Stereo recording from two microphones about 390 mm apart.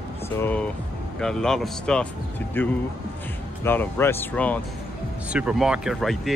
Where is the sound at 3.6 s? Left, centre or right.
Centre.